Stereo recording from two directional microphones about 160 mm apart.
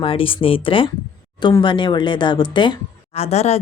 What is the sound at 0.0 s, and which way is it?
Speech, 35° left (ahead or behind).